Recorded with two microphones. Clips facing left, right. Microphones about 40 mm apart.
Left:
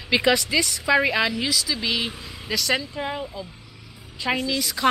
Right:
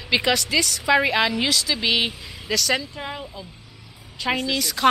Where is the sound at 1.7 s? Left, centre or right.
Right.